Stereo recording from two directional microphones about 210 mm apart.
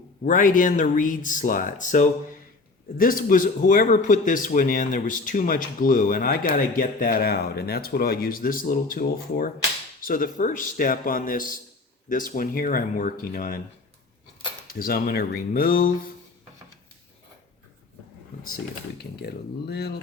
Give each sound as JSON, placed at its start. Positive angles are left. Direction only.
{"t": 0.3, "sound": "speech", "side_deg": 40}
{"t": 14.7, "sound": "speech", "side_deg": 45}
{"t": 19.2, "sound": "speech", "side_deg": 50}